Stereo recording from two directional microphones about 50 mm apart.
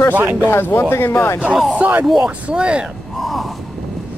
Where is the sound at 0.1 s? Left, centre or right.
Right.